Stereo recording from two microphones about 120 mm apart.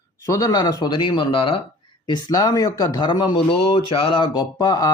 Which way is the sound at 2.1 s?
35° left (ahead or behind).